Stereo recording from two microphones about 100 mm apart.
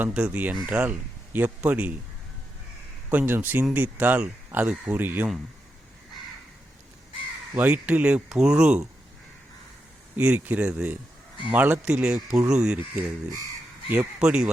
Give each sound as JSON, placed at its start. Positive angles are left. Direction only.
{"t": 0.0, "sound": "speech", "side_deg": -15}
{"t": 3.1, "sound": "speech", "side_deg": -20}
{"t": 7.5, "sound": "speech", "side_deg": -15}
{"t": 10.2, "sound": "speech", "side_deg": -15}
{"t": 14.2, "sound": "speech", "side_deg": -10}